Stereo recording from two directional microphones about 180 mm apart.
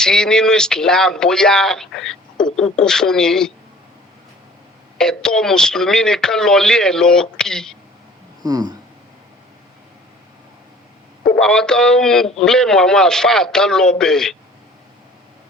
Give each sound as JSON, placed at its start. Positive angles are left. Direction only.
{"t": 0.0, "sound": "speech", "side_deg": 5}
{"t": 4.9, "sound": "speech", "side_deg": 5}
{"t": 8.4, "sound": "a sound", "side_deg": -20}
{"t": 11.3, "sound": "speech", "side_deg": 5}